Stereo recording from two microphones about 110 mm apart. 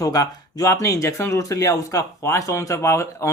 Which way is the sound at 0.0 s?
35° left (ahead or behind).